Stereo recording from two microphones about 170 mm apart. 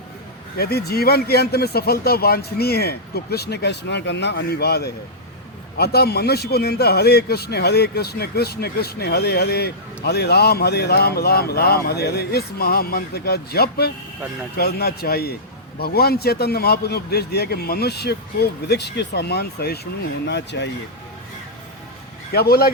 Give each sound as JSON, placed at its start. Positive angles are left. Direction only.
{"t": 0.5, "sound": "a man's voice", "side_deg": 65}
{"t": 22.3, "sound": "speech", "side_deg": 65}